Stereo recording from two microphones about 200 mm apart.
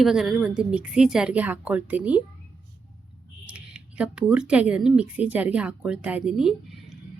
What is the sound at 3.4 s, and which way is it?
Speech, 5° right (ahead or behind).